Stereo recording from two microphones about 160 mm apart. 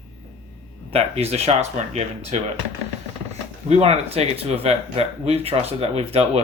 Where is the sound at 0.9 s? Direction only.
40° right (ahead or behind).